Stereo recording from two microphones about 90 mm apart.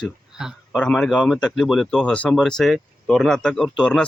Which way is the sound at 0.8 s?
5° left (ahead or behind).